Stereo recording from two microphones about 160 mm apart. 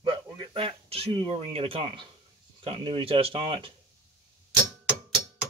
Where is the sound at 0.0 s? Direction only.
30° right (ahead or behind).